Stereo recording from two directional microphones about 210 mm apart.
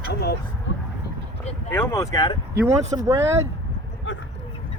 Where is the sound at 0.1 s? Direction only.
50° left (ahead or behind).